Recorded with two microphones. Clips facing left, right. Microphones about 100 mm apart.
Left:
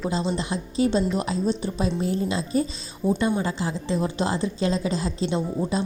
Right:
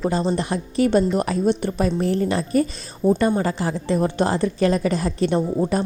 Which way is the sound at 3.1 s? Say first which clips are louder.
Right 4 dB; 55° right (ahead or behind).